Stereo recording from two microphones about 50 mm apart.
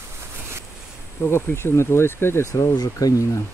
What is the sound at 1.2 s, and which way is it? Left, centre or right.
Speech, left.